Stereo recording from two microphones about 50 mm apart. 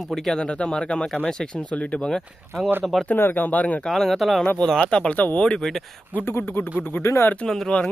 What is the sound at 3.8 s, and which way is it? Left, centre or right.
Speech, centre.